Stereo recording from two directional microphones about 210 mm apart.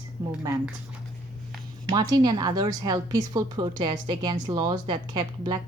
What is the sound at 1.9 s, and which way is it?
A woman's voice, 20° right (ahead or behind).